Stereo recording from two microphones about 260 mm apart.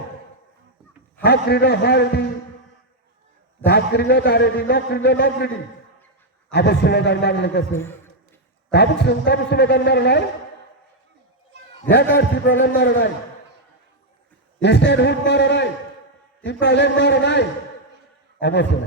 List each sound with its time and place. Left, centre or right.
1.2 s a man's voice: left
3.7 s a man's voice: left
6.5 s a man's voice: left
7.7 s a man's voice: centre
8.7 s a man's voice: left
12.1 s a man's voice: left
14.6 s a man's voice: left